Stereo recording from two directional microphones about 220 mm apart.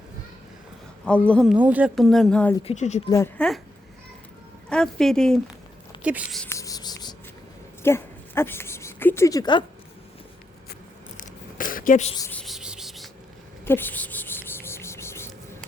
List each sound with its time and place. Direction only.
1.0 s speech: 5° left (ahead or behind)
1.5 s speech: 5° right (ahead or behind)
2.6 s speech: 30° left (ahead or behind)
3.1 s speech: 10° left (ahead or behind)
4.7 s speech: 5° left (ahead or behind)
6.4 s a sound: 15° left (ahead or behind)
11.2 s a sound: 40° left (ahead or behind)
12.1 s speech: 15° left (ahead or behind)
12.4 s a sound: centre (ahead or behind)